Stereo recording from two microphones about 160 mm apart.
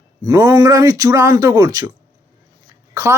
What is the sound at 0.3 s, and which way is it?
Speech, 20° right (ahead or behind).